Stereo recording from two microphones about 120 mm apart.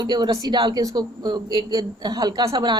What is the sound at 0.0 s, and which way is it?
A woman's voice, 35° right (ahead or behind).